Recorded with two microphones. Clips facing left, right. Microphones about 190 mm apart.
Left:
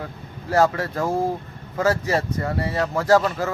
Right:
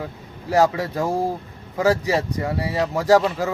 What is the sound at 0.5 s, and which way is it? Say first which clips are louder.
Speech: right 1 dB; 15° right (ahead or behind).